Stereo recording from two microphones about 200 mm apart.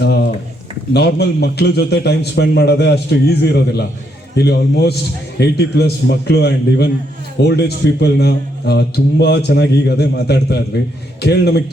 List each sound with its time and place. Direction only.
0.9 s a man's voice: 55° left (ahead or behind)